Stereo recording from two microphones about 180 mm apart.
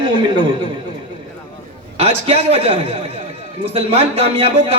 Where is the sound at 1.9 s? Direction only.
35° right (ahead or behind).